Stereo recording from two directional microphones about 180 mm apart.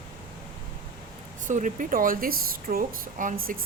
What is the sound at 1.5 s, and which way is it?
Speech, 45° right (ahead or behind).